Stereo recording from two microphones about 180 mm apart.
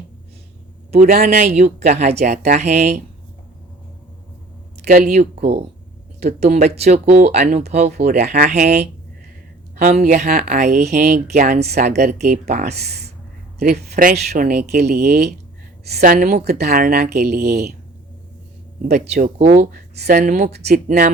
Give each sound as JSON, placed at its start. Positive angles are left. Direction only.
{"t": 0.9, "sound": "a man's voice", "side_deg": -40}
{"t": 1.1, "sound": "speech", "side_deg": -55}
{"t": 4.9, "sound": "speech", "side_deg": -50}
{"t": 5.4, "sound": "speech", "side_deg": -35}
{"t": 7.9, "sound": "speech", "side_deg": -60}
{"t": 8.4, "sound": "speech", "side_deg": -40}
{"t": 12.8, "sound": "speech", "side_deg": -65}
{"t": 19.4, "sound": "speech", "side_deg": -35}
{"t": 20.7, "sound": "speech", "side_deg": -55}